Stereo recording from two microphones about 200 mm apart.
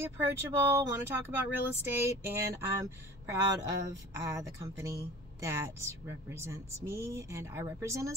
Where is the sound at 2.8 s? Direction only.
15° right (ahead or behind).